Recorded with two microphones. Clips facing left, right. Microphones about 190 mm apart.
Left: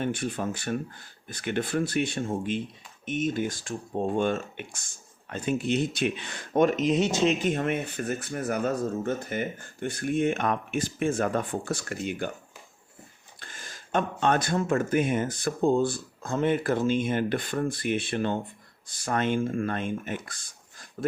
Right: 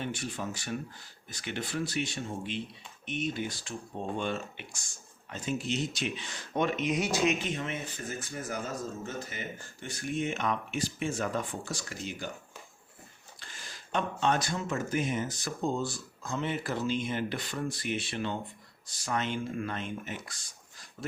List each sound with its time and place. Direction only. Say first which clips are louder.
0.0 s speech: left 7 dB; 55° left (ahead or behind)
6.9 s speech: left 5 dB; 25° left (ahead or behind)
7.4 s speech: left 8 dB; 55° left (ahead or behind)
13.4 s speech: left 4 dB; 50° left (ahead or behind)